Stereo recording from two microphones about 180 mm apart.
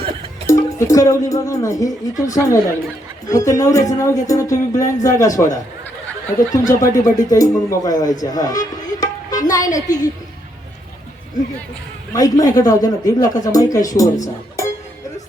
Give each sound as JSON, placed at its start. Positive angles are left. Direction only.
{"t": 0.4, "sound": "speech", "side_deg": 15}
{"t": 8.2, "sound": "music", "side_deg": 20}
{"t": 9.7, "sound": "speech", "side_deg": 20}
{"t": 12.1, "sound": "speech", "side_deg": 20}